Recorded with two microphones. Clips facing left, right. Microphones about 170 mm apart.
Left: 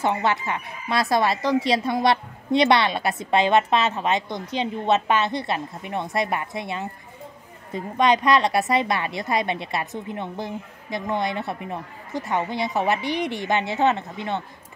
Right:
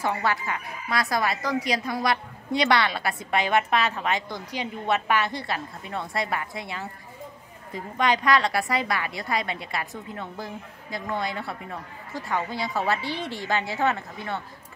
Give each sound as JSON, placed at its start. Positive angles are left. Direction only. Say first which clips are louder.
{"t": 0.0, "sound": "speech", "louder": "left 4 dB", "side_deg": 25}